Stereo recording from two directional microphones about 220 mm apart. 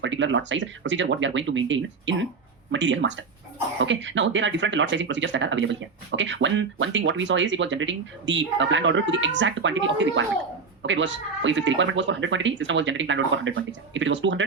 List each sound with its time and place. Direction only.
0.0 s speech: 55° right (ahead or behind)